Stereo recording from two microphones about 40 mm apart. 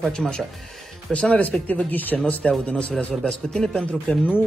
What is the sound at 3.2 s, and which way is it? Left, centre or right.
Speech, centre.